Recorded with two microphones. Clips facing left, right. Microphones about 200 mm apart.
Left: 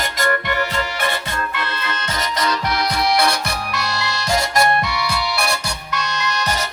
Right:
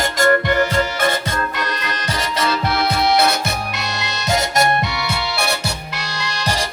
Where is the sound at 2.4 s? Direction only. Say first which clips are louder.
Right 2 dB; 25° right (ahead or behind).